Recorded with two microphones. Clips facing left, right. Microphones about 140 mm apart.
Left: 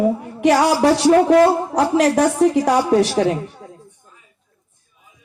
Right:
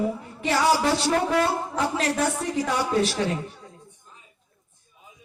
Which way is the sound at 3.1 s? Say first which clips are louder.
Left 8 dB; 50° left (ahead or behind).